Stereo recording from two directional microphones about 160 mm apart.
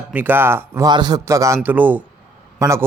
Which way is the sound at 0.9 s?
25° right (ahead or behind).